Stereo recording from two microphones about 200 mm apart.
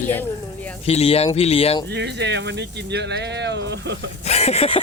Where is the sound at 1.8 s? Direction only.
55° right (ahead or behind).